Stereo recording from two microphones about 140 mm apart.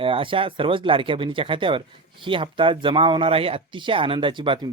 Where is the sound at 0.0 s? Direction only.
40° right (ahead or behind).